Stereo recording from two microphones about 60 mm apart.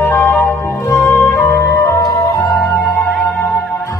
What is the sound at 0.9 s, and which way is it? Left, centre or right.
Music, left.